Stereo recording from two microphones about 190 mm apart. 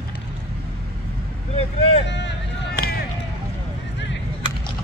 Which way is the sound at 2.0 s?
65° left (ahead or behind).